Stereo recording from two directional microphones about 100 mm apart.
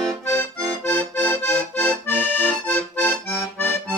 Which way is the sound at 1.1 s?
20° left (ahead or behind).